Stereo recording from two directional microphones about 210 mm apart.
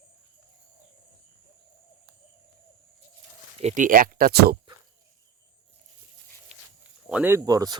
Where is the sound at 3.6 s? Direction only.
35° right (ahead or behind).